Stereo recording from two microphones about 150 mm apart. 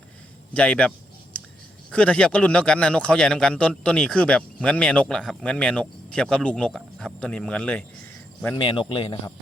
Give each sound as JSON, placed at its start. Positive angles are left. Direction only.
{"t": 0.5, "sound": "a sound", "side_deg": 5}
{"t": 1.9, "sound": "a man's voice", "side_deg": 5}
{"t": 8.7, "sound": "speech", "side_deg": 35}